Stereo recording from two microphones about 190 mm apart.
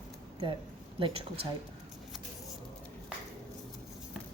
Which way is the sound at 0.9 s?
30° right (ahead or behind).